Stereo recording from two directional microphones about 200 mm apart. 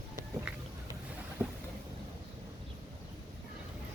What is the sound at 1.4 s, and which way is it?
Boat, 10° right (ahead or behind).